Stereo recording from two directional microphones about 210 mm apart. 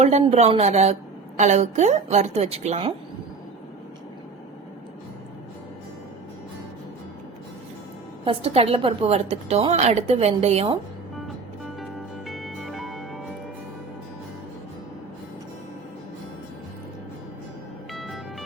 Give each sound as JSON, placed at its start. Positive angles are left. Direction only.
{"t": 0.0, "sound": "a woman's voice", "side_deg": -30}
{"t": 8.2, "sound": "a woman's voice", "side_deg": -25}
{"t": 11.8, "sound": "music", "side_deg": 0}
{"t": 18.0, "sound": "music", "side_deg": 0}